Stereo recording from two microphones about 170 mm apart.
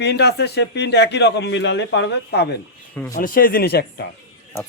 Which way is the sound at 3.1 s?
55° left (ahead or behind).